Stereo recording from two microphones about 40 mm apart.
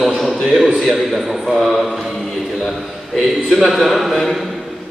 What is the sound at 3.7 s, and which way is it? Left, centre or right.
Speech, centre.